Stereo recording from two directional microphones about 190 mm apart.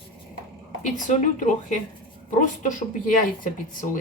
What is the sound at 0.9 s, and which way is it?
Speech, 40° left (ahead or behind).